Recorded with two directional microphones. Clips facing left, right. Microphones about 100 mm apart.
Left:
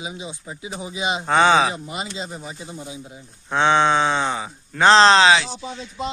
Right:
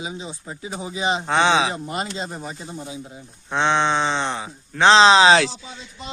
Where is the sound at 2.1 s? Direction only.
Centre (ahead or behind).